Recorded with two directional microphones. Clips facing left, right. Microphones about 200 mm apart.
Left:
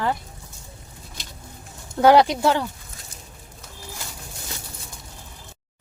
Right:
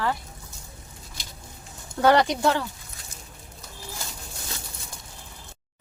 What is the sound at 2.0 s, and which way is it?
Speech, 10° left (ahead or behind).